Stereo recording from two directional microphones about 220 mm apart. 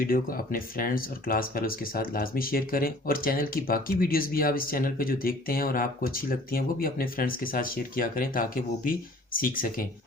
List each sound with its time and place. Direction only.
0.0 s speech: 40° left (ahead or behind)